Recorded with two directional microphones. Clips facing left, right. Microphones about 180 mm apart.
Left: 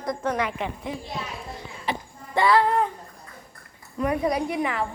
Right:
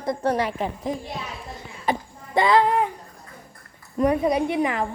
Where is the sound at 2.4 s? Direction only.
20° right (ahead or behind).